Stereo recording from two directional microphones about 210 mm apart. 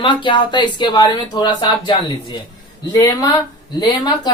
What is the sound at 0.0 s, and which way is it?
A woman's voice, 25° left (ahead or behind).